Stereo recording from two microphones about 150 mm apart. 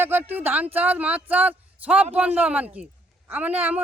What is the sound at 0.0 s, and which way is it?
Speech, 15° right (ahead or behind).